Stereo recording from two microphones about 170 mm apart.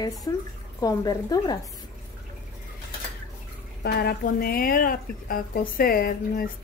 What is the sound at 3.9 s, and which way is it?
Speech, 70° left (ahead or behind).